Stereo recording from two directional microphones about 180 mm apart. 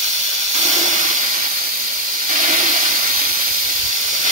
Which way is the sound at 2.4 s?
45° right (ahead or behind).